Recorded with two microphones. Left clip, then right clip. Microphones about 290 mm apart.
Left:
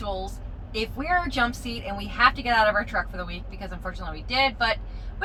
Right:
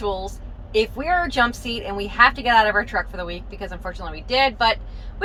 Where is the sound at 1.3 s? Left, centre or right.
Centre.